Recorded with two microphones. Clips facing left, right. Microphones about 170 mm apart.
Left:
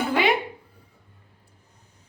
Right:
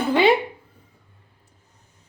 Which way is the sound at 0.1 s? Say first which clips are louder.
Right 6 dB; 30° right (ahead or behind).